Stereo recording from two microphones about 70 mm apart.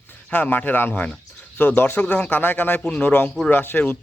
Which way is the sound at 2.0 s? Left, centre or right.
Centre.